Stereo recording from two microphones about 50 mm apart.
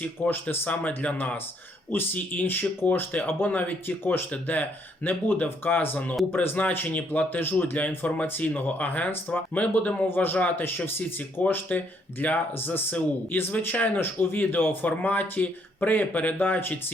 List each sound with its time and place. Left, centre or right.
0.0 s a man's voice: left